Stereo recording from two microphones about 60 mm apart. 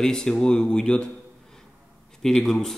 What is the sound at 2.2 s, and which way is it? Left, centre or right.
Speech, centre.